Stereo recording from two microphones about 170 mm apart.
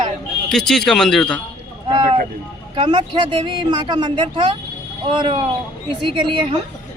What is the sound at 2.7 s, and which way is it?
A man's voice, 30° right (ahead or behind).